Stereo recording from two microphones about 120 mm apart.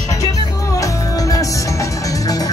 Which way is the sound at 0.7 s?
30° left (ahead or behind).